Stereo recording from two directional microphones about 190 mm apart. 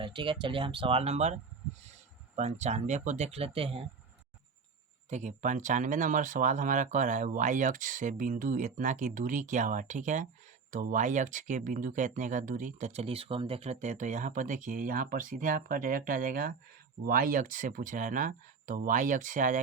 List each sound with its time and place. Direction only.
0.0 s speech: 25° right (ahead or behind)
5.0 s speech: 40° right (ahead or behind)